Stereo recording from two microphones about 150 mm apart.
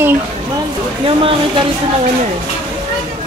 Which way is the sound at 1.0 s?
35° right (ahead or behind).